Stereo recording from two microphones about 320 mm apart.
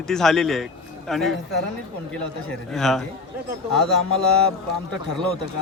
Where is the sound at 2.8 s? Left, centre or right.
Centre.